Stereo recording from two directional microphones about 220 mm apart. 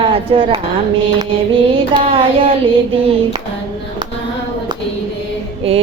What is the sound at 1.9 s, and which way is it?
Music, 25° right (ahead or behind).